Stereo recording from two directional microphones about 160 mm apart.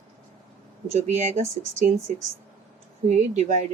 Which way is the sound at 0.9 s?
45° right (ahead or behind).